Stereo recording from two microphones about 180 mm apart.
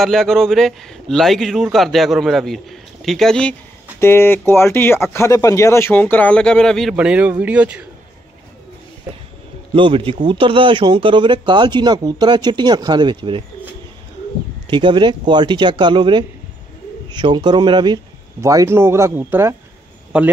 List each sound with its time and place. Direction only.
0.0 s a man's voice: centre (ahead or behind)
9.8 s speech: 30° right (ahead or behind)
14.7 s a man's voice: 25° right (ahead or behind); by 20.3 s 5° right (ahead or behind)